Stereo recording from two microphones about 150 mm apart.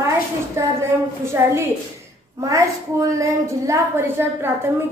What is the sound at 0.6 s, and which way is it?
A woman's voice, 20° right (ahead or behind).